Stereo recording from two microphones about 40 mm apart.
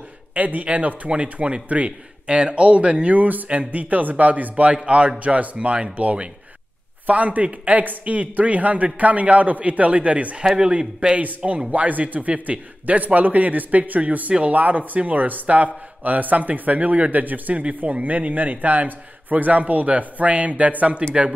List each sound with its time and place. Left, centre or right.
0.3 s a man's voice: right
3.2 s speech: right
3.4 s a man's voice: right
11.1 s a man's voice: right
21.1 s speech: right